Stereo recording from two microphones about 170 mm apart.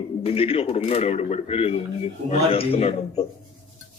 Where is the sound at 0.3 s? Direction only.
35° left (ahead or behind).